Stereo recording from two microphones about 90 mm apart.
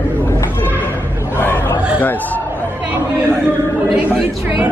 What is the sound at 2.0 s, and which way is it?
Speech, 20° left (ahead or behind).